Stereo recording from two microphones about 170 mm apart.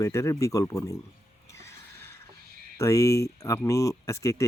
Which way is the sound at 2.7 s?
15° left (ahead or behind).